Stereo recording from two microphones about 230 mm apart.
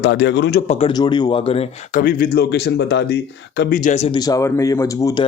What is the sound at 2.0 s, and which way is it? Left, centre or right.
A man's voice, left.